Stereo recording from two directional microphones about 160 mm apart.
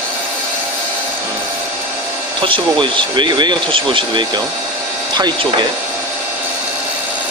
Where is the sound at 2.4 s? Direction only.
30° right (ahead or behind).